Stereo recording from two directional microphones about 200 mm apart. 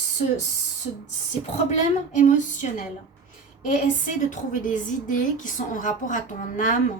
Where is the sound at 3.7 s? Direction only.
40° left (ahead or behind).